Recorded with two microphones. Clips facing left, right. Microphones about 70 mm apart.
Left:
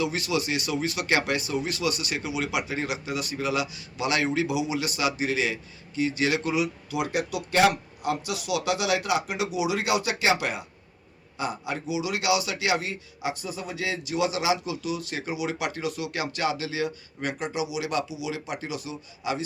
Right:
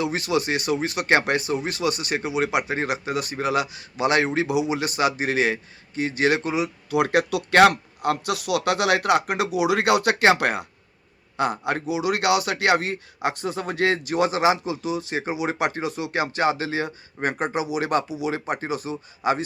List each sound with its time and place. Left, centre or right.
0.0 s speech: right
6.9 s speech: right